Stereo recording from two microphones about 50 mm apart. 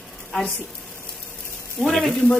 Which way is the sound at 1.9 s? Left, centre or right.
Centre.